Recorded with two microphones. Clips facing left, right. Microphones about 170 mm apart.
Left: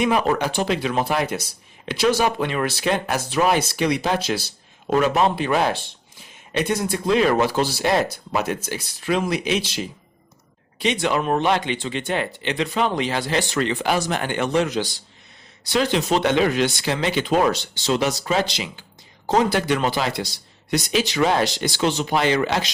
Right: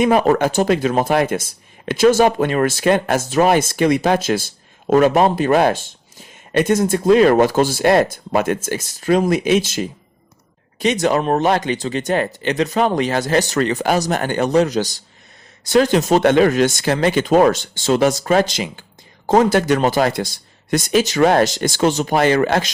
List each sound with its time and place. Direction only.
0.0 s speech: 45° right (ahead or behind)